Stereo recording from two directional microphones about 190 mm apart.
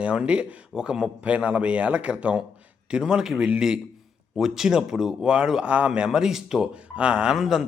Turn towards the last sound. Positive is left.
turn(degrees=0)  # may be behind; listen again after turning